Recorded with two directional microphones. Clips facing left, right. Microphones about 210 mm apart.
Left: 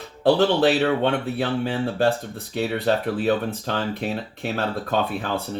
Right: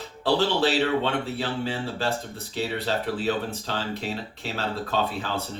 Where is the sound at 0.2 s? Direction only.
55° left (ahead or behind).